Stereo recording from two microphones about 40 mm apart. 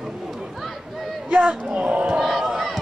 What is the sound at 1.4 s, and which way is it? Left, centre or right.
Speech, right.